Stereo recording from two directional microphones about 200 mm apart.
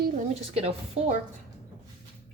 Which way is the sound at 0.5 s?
30° right (ahead or behind).